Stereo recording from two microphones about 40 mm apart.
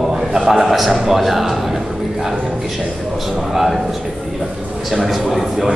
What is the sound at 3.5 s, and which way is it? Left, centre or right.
Speech, centre.